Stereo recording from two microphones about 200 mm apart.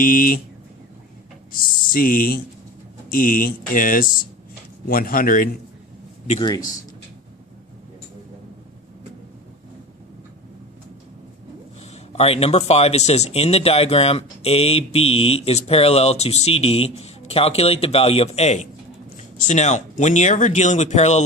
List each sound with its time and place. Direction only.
0.0 s speech: 45° left (ahead or behind)
1.9 s speech: 45° left (ahead or behind)
12.1 s speech: 30° left (ahead or behind)